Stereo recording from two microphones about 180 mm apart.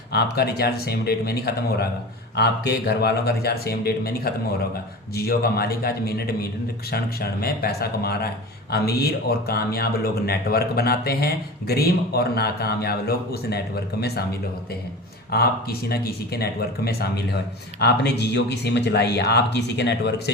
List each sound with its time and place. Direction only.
0.1 s a man's voice: 65° left (ahead or behind)
15.3 s a man's voice: 60° left (ahead or behind)